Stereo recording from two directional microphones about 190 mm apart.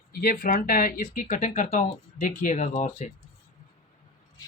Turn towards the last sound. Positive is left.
turn(degrees=40)  # may be behind; listen again after turning